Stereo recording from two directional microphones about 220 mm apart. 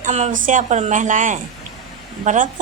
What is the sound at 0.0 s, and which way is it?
A woman's voice, 35° right (ahead or behind).